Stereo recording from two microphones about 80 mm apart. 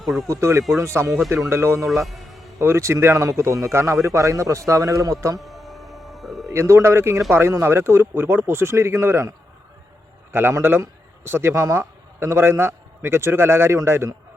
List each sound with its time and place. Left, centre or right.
0.0 s speech: centre
0.3 s a man's voice: right
1.9 s music: centre
2.6 s a man's voice: right
5.4 s a sound: centre
6.5 s a man's voice: right
10.6 s a man's voice: right